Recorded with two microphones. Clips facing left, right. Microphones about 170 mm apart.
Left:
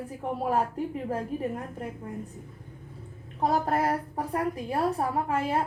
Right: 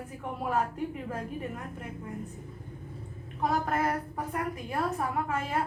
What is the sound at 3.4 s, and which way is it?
A woman's voice, 35° left (ahead or behind).